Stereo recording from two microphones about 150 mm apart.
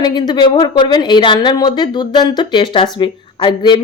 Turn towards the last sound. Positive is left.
turn(degrees=35)  # may be behind; listen again after turning